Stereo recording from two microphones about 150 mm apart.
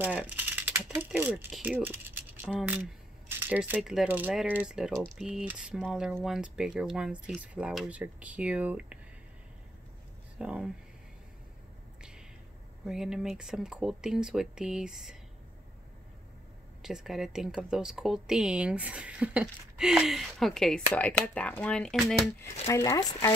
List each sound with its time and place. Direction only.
0.0 s a sound: 10° right (ahead or behind)
1.5 s speech: 5° right (ahead or behind)
10.4 s speech: 5° right (ahead or behind)
12.8 s speech: 5° right (ahead or behind)
16.8 s speech: centre (ahead or behind)
22.7 s speech: 20° left (ahead or behind)